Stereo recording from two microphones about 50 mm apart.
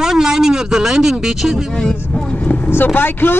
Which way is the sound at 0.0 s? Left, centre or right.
Centre.